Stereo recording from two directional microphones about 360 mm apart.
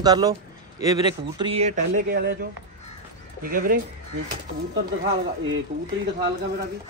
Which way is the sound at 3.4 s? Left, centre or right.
Right.